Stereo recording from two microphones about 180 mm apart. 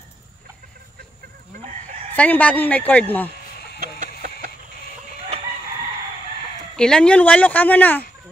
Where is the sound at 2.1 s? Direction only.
10° left (ahead or behind).